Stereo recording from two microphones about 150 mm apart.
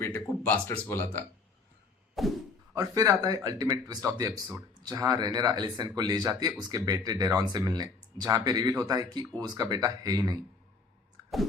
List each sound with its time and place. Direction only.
0.0 s speech: 15° left (ahead or behind)
2.2 s whack: centre (ahead or behind)
2.7 s speech: 25° right (ahead or behind)